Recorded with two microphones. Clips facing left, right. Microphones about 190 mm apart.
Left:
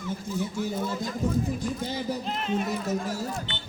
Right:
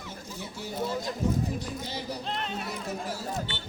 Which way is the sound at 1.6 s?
50° left (ahead or behind).